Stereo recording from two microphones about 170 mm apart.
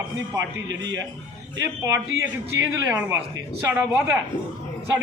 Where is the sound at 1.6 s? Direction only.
20° right (ahead or behind).